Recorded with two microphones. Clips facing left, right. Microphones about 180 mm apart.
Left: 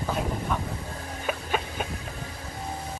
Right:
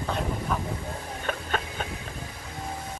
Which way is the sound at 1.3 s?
10° left (ahead or behind).